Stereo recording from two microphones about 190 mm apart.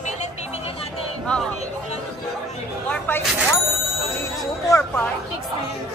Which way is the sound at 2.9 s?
5° left (ahead or behind).